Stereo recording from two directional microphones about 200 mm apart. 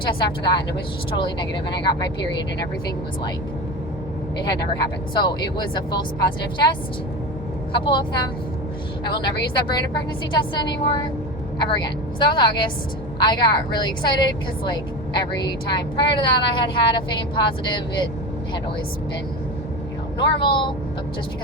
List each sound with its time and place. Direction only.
0.0 s speech: 25° left (ahead or behind)
5.1 s speech: 20° left (ahead or behind)
10.3 s speech: 20° left (ahead or behind)
20.1 s speech: 25° left (ahead or behind)